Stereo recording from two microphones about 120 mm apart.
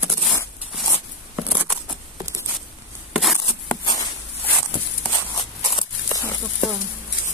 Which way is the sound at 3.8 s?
35° left (ahead or behind).